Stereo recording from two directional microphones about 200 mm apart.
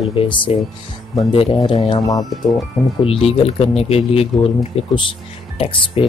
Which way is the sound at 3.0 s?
30° left (ahead or behind).